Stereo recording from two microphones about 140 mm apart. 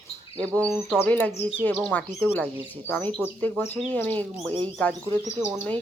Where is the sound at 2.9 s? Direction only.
10° left (ahead or behind).